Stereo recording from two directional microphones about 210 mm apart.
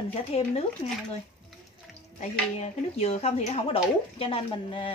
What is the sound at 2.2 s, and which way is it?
Speech, 30° left (ahead or behind).